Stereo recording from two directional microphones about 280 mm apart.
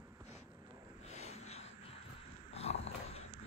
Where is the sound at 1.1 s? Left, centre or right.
Left.